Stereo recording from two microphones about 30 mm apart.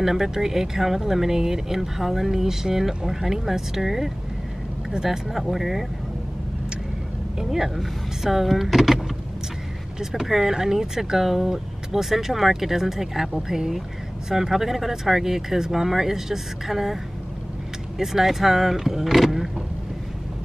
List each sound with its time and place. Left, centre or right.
0.0 s speech: centre
5.4 s speech: centre
7.3 s speech: centre
9.9 s speech: centre